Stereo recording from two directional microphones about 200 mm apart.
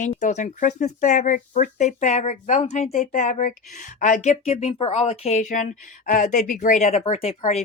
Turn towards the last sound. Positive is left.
turn(degrees=35)  # may be behind; listen again after turning